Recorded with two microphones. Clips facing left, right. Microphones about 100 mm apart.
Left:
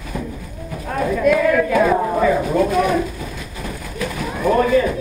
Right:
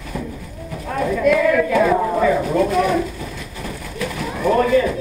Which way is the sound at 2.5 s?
30° left (ahead or behind).